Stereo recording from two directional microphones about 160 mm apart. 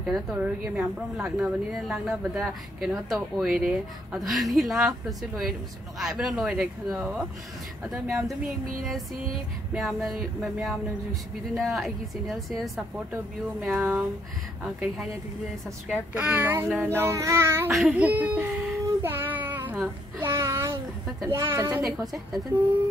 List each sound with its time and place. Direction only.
0.0 s speech: 5° right (ahead or behind)
5.9 s speech: centre (ahead or behind)
13.7 s a child's voice: 10° right (ahead or behind)
14.6 s a child's voice: centre (ahead or behind)
17.6 s child singing: 5° right (ahead or behind)
21.3 s a child's voice: 15° right (ahead or behind)
21.8 s speech: centre (ahead or behind)